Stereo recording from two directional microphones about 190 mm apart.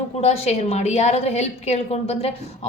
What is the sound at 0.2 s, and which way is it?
A woman's voice, 35° left (ahead or behind).